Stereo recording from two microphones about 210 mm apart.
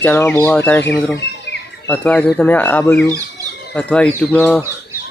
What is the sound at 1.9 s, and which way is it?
Speech, 5° left (ahead or behind).